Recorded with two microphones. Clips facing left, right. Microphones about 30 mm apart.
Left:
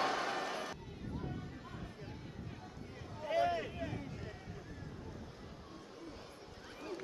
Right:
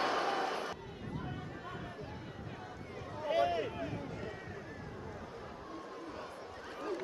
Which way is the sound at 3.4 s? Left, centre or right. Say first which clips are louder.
Right 1 dB; centre.